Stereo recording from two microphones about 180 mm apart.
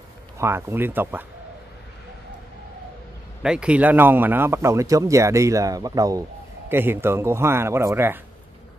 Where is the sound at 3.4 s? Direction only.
5° right (ahead or behind).